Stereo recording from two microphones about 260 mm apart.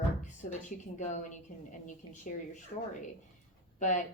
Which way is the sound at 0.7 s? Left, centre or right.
Left.